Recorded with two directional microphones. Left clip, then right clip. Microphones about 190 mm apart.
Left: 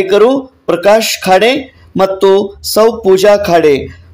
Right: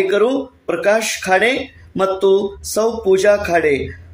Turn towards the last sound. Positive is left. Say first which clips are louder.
# left 7 dB
turn(degrees=35)  # may be behind; listen again after turning